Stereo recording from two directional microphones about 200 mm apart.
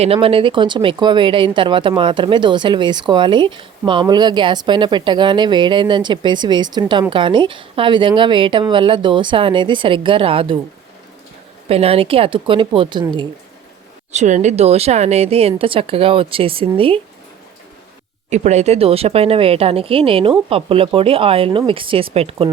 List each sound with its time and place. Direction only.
0.0 s speech: 30° right (ahead or behind)
11.7 s speech: 30° right (ahead or behind)
14.1 s speech: 35° right (ahead or behind)
18.3 s speech: 35° right (ahead or behind)